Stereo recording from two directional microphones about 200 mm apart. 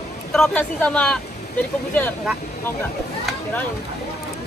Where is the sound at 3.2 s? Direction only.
10° left (ahead or behind).